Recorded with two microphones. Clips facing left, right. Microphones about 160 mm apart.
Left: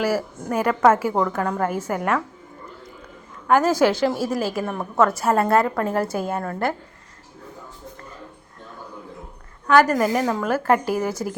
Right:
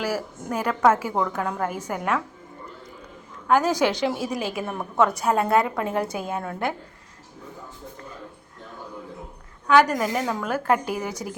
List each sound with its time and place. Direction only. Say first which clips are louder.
0.0 s a woman's voice: left 5 dB; 10° left (ahead or behind)
3.4 s a woman's voice: left 3 dB; 5° left (ahead or behind)
9.6 s a woman's voice: left 2 dB; centre (ahead or behind)